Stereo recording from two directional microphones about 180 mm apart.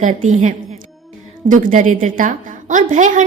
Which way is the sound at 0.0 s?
45° right (ahead or behind).